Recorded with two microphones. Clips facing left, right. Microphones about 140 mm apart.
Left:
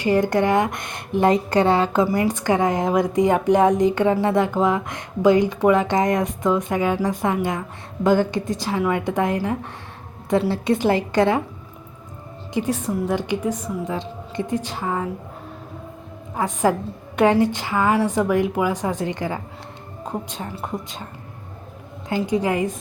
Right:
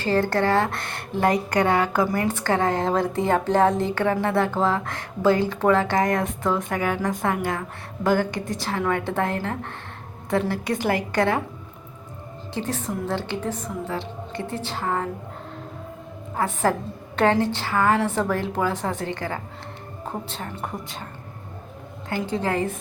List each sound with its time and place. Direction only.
0.0 s a woman's voice: 15° left (ahead or behind)
12.5 s a woman's voice: 10° left (ahead or behind)
16.3 s a woman's voice: 15° left (ahead or behind)
22.3 s a woman's voice: 15° left (ahead or behind)